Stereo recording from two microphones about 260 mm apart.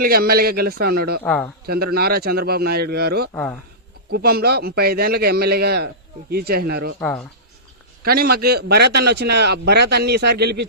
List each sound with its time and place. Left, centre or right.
0.0 s a man's voice: right
1.2 s speech: centre
1.6 s a man's voice: right
3.3 s speech: centre
4.1 s a man's voice: right
7.0 s speech: centre
8.0 s a man's voice: right